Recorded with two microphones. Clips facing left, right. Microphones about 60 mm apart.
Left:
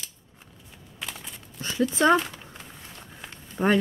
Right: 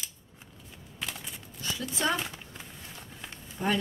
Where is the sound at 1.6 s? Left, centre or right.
Left.